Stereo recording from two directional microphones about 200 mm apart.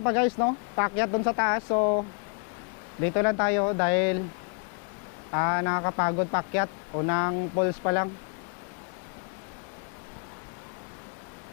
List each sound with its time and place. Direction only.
0.0 s a man's voice: 15° left (ahead or behind)
3.1 s speech: 15° left (ahead or behind)
5.3 s a man's voice: 15° left (ahead or behind)